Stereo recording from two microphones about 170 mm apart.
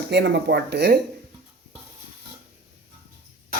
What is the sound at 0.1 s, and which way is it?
Speech, 90° right.